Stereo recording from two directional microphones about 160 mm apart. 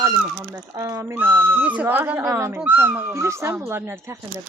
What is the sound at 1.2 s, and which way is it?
Speech, 15° right (ahead or behind).